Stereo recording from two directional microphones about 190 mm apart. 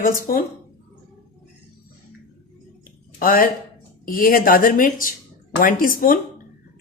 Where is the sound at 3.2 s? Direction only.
50° left (ahead or behind).